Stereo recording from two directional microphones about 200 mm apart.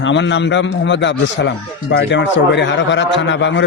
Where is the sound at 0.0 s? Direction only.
65° left (ahead or behind).